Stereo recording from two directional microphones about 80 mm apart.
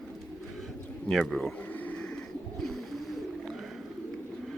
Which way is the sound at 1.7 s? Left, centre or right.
Centre.